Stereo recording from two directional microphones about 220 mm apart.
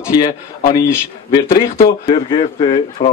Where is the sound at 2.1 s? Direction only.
25° left (ahead or behind).